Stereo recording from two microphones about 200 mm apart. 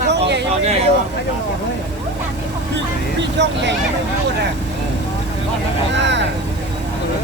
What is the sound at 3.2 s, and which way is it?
Speech, 60° right (ahead or behind).